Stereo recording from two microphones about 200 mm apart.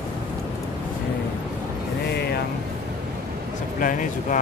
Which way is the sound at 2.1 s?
55° left (ahead or behind).